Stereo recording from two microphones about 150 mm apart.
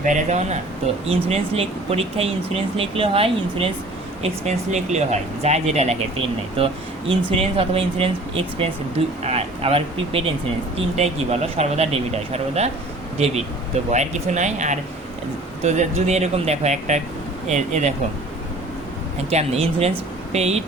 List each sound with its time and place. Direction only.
0.0 s speech: 55° right (ahead or behind); by 3.7 s 40° right (ahead or behind)
4.2 s speech: 50° right (ahead or behind)
13.9 s speech: 50° right (ahead or behind)
19.3 s speech: 45° right (ahead or behind)